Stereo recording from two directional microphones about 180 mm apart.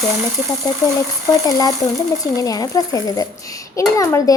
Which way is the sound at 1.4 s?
20° left (ahead or behind).